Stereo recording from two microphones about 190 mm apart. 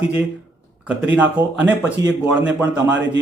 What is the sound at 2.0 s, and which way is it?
Speech, 20° right (ahead or behind).